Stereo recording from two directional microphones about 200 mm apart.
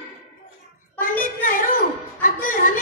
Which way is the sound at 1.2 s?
45° left (ahead or behind).